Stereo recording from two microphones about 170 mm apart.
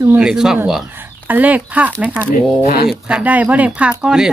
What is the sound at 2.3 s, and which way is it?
Speech, 60° left (ahead or behind).